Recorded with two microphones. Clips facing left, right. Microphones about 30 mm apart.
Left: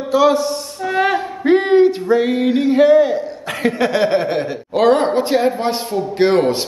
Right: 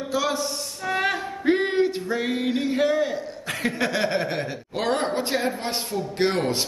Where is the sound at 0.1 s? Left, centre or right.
Centre.